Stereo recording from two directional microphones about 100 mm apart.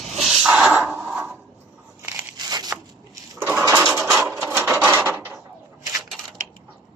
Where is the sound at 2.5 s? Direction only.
40° right (ahead or behind).